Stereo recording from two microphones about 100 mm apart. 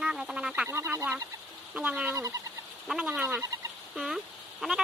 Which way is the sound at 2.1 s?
30° right (ahead or behind).